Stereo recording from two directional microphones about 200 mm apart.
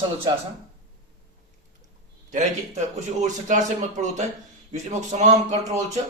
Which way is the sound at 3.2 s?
35° right (ahead or behind).